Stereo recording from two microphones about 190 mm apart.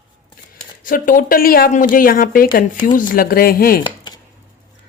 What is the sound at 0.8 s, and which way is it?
Speech, 45° left (ahead or behind).